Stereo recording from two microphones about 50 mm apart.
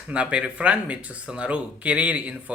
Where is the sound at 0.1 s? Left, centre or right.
Right.